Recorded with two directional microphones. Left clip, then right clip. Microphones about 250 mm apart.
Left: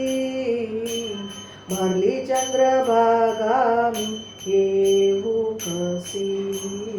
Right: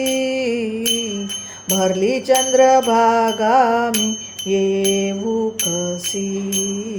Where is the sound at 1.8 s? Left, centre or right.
Right.